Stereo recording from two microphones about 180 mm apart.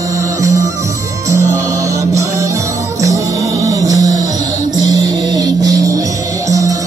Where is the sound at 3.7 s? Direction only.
20° right (ahead or behind).